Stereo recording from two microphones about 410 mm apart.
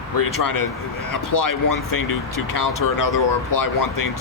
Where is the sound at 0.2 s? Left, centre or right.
Left.